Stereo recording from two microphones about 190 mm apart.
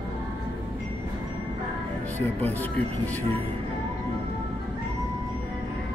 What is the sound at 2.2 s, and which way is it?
Speech, 10° left (ahead or behind).